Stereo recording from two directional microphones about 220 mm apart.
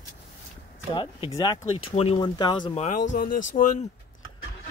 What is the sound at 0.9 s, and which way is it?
Speech, 20° left (ahead or behind).